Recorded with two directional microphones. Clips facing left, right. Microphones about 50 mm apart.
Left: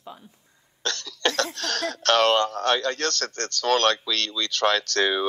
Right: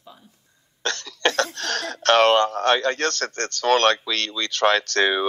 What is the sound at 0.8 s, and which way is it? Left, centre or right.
Speech, right.